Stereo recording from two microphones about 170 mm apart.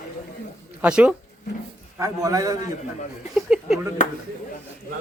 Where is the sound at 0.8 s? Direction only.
5° right (ahead or behind).